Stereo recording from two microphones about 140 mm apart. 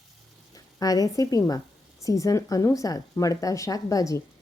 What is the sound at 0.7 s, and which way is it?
Speech, 25° left (ahead or behind).